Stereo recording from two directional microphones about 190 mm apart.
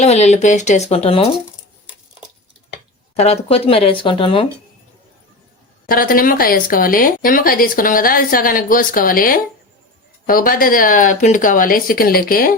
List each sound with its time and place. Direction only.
0.0 s speech: 35° left (ahead or behind)
3.2 s speech: 35° left (ahead or behind)
5.8 s speech: 50° left (ahead or behind)